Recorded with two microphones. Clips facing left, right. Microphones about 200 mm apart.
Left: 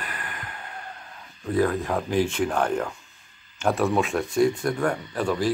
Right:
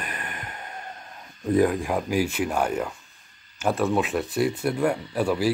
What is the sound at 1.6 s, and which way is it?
Speech, 15° right (ahead or behind).